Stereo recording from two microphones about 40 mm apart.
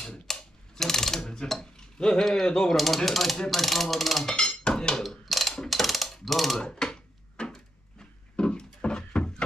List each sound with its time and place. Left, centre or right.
0.0 s mechanisms: centre
1.2 s cutlery: centre
2.4 s speech: centre
2.7 s speech: centre
4.2 s dishes: centre
5.2 s mechanisms: centre
6.6 s a sound: centre